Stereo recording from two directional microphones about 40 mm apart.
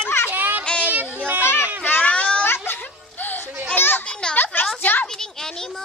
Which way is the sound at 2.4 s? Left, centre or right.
Left.